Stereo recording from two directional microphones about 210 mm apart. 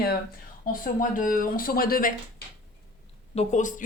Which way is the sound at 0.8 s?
40° left (ahead or behind).